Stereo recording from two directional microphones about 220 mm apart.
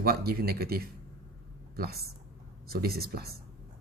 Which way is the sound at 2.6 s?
45° right (ahead or behind).